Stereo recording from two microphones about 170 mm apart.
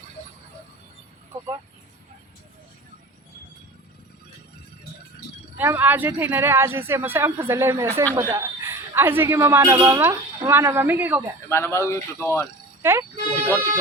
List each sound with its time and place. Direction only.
5.5 s speech: 10° right (ahead or behind)
11.4 s speech: 15° left (ahead or behind)
12.8 s a sound: 15° right (ahead or behind)